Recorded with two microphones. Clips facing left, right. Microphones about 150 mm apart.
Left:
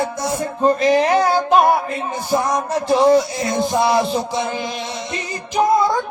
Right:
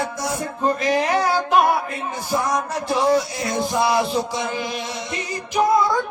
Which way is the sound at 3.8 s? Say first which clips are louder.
Left 2 dB; 25° left (ahead or behind).